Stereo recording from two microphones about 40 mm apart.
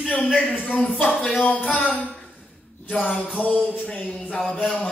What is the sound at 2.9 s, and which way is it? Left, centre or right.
Music, left.